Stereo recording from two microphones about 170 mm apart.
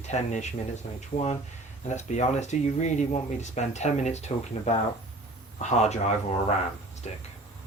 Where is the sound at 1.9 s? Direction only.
45° left (ahead or behind).